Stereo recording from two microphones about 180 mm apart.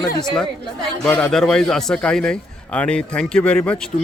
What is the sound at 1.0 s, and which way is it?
A man's voice, 5° left (ahead or behind).